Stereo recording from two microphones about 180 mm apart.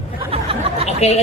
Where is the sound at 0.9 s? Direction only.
35° left (ahead or behind).